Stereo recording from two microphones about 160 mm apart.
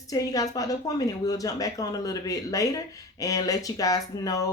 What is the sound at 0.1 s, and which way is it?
A woman's voice, 20° left (ahead or behind).